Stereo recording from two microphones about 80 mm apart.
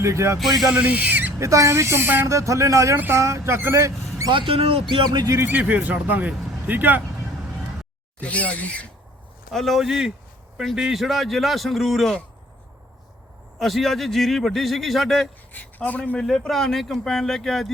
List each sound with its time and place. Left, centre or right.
0.0 s speech: right
0.3 s a man's voice: centre
0.7 s speech: centre
1.4 s speech: right
2.2 s speech: right
4.9 s speech: right
5.5 s speech: centre
8.2 s speech: centre
9.5 s a man's voice: centre
13.6 s a man's voice: centre
15.5 s speech: centre
16.1 s a man's voice: centre